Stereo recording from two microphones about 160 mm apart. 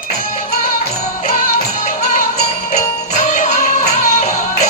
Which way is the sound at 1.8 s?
55° left (ahead or behind).